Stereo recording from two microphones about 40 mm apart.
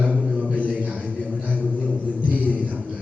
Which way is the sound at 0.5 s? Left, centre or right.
Right.